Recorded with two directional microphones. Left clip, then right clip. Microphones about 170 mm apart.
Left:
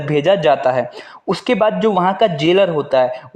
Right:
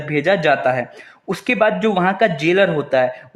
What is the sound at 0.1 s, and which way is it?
Speech, 25° left (ahead or behind).